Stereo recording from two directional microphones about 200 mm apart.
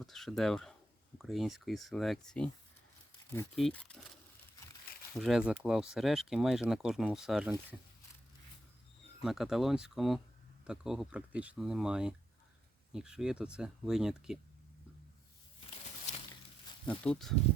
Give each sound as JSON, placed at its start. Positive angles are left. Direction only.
{"t": 0.0, "sound": "speech", "side_deg": 0}
{"t": 3.5, "sound": "speech", "side_deg": 5}
{"t": 5.2, "sound": "speech", "side_deg": -5}
{"t": 9.2, "sound": "speech", "side_deg": 0}
{"t": 16.1, "sound": "a sound", "side_deg": 35}
{"t": 16.8, "sound": "speech", "side_deg": 5}